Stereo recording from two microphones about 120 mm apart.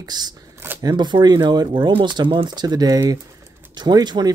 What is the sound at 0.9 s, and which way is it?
Speech, 40° right (ahead or behind).